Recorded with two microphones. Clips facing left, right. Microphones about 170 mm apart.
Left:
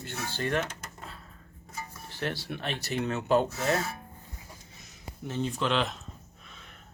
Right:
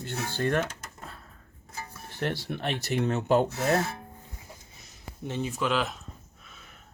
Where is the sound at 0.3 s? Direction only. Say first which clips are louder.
Right 3 dB; 50° right (ahead or behind).